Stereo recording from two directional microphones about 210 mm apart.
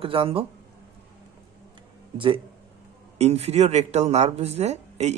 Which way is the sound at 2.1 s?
25° right (ahead or behind).